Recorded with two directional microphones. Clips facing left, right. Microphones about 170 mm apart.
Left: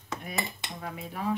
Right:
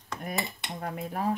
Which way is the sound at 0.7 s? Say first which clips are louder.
Right 5 dB; 45° right (ahead or behind).